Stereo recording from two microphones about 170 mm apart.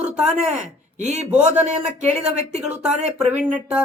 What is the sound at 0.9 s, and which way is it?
Speech, 40° right (ahead or behind).